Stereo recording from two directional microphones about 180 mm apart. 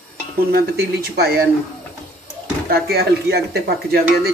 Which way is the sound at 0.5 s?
60° right (ahead or behind).